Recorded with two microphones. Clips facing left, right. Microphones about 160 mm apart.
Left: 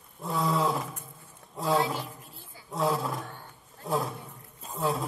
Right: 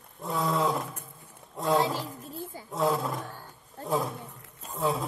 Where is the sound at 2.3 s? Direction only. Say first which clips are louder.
Right 12 dB; 45° right (ahead or behind).